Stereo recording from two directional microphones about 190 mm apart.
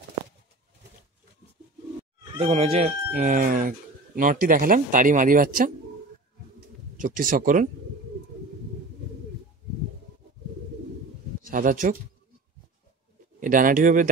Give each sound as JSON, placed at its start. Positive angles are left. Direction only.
{"t": 2.3, "sound": "speech", "side_deg": -30}
{"t": 3.3, "sound": "speech", "side_deg": -45}
{"t": 7.0, "sound": "speech", "side_deg": -45}
{"t": 11.4, "sound": "speech", "side_deg": -45}
{"t": 13.4, "sound": "speech", "side_deg": -45}